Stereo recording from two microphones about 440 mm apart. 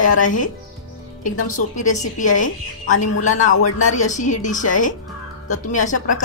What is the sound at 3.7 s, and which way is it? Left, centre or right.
A woman's voice, centre.